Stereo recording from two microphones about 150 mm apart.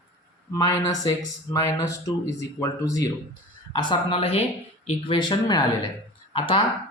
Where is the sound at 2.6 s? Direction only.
20° left (ahead or behind).